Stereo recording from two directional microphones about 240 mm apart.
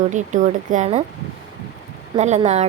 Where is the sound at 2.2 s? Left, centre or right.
Right.